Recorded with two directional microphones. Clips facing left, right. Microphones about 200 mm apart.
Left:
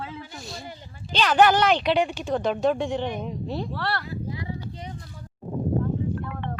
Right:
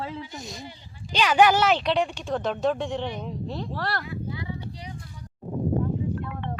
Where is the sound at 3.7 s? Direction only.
40° right (ahead or behind).